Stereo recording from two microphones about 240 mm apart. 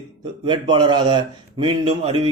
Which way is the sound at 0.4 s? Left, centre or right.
Centre.